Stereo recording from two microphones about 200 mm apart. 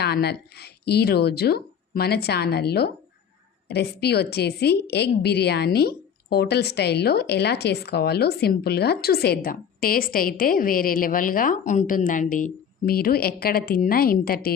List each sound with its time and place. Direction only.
0.0 s a woman's voice: 55° left (ahead or behind)